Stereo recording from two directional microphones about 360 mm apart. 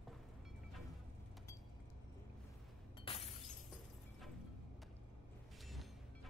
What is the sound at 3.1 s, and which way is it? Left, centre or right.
Shatter, centre.